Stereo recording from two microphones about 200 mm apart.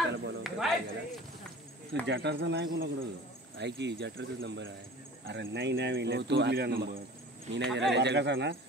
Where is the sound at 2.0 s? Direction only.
60° right (ahead or behind).